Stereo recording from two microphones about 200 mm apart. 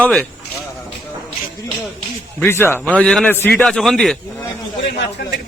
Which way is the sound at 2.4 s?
10° left (ahead or behind).